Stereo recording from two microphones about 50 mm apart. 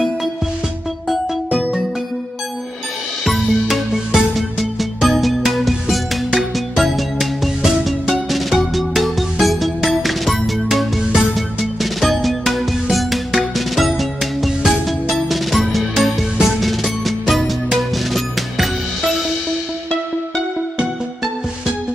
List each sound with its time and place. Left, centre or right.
1.5 s music: centre
3.3 s music: centre